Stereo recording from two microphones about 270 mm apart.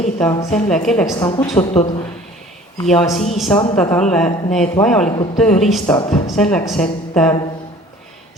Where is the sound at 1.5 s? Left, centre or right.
Left.